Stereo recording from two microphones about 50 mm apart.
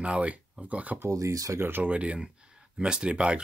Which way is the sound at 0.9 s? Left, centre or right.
Right.